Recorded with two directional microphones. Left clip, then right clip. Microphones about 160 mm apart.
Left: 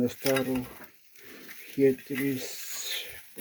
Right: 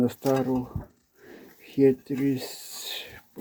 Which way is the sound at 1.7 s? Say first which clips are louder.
Right 3 dB; 15° right (ahead or behind).